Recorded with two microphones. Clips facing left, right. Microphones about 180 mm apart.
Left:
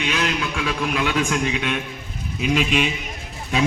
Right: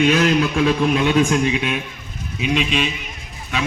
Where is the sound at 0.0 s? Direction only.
45° right (ahead or behind).